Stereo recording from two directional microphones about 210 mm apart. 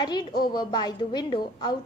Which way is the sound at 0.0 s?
20° left (ahead or behind).